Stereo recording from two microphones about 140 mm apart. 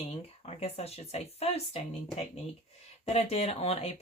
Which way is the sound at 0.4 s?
50° left (ahead or behind).